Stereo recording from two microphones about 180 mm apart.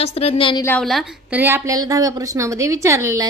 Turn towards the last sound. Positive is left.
turn(degrees=-15)  # may be behind; listen again after turning